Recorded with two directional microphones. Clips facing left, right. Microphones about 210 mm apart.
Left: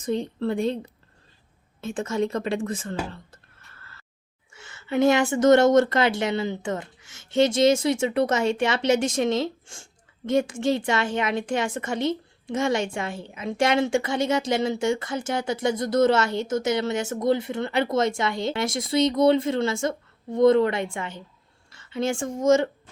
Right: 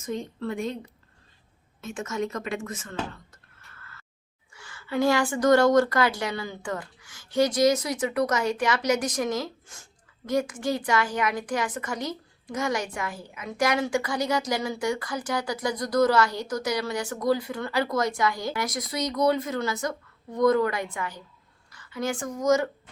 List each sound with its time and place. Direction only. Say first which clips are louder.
0.0 s a woman's voice: left 5 dB; 30° left (ahead or behind)
1.8 s a woman's voice: left 5 dB; 30° left (ahead or behind)
3.1 s a sound: left 3 dB; 30° left (ahead or behind)
4.5 s a woman's voice: left 3 dB; 25° left (ahead or behind)